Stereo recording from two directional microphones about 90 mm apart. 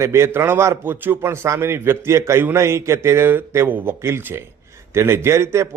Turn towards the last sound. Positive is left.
turn(degrees=-30)  # may be behind; listen again after turning